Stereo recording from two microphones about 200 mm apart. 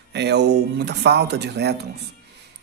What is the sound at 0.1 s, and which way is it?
Speech, 55° right (ahead or behind).